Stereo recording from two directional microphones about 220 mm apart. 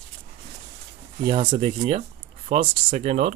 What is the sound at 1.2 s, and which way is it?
Speech, 25° right (ahead or behind).